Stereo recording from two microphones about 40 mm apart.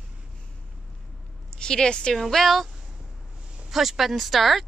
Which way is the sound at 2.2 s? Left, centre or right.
Centre.